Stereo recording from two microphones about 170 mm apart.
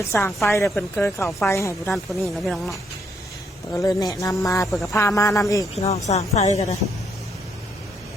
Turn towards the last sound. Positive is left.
turn(degrees=40)  # may be behind; listen again after turning